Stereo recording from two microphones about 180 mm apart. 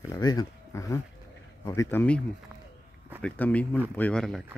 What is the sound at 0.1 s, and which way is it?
Speech, 20° left (ahead or behind).